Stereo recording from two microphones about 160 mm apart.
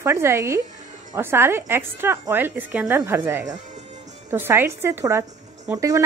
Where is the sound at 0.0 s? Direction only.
15° right (ahead or behind).